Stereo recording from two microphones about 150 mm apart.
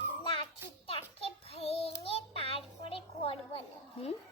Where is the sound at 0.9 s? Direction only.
40° left (ahead or behind).